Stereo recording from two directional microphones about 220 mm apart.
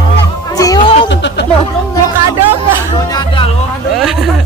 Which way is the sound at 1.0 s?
55° left (ahead or behind).